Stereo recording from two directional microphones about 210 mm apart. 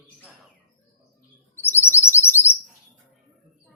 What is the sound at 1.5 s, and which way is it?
Chirp, 10° left (ahead or behind).